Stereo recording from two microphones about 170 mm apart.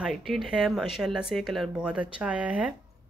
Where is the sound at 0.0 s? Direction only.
Centre (ahead or behind).